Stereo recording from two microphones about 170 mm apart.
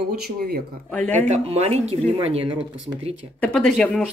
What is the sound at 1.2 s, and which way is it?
Speech, 40° right (ahead or behind).